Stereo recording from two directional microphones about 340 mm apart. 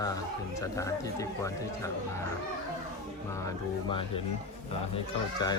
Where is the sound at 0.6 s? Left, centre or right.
Centre.